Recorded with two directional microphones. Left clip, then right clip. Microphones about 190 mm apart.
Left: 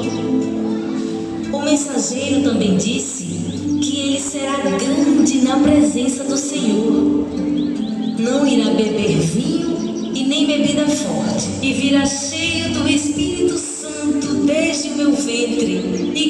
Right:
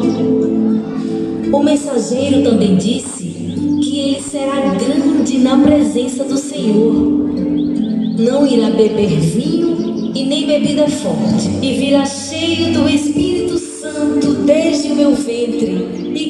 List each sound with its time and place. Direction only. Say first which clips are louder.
1.5 s a woman's voice: right 5 dB; 30° right (ahead or behind)
4.6 s music: right 2 dB; 25° right (ahead or behind)
8.2 s a woman's voice: right 4 dB; 25° right (ahead or behind)
14.2 s music: right 5 dB; 30° right (ahead or behind)